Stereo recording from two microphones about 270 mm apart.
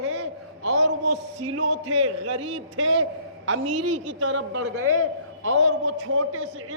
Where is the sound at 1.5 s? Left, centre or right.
Right.